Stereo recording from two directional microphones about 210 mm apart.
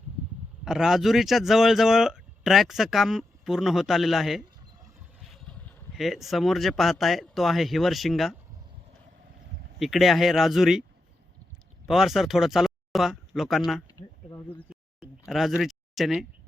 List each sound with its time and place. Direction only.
0.6 s speech: centre (ahead or behind)
9.7 s speech: centre (ahead or behind)
11.9 s speech: centre (ahead or behind)
13.8 s speech: 15° left (ahead or behind)
15.3 s speech: centre (ahead or behind)